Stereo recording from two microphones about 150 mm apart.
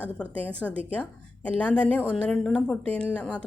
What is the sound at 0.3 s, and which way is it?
A woman's voice, 10° left (ahead or behind).